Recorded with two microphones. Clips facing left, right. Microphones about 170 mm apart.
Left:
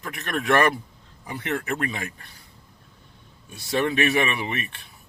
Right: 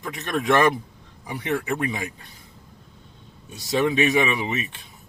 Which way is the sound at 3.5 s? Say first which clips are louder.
Right 2 dB; 20° right (ahead or behind).